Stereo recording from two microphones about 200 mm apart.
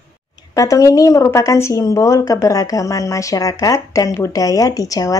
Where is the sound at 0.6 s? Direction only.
15° left (ahead or behind).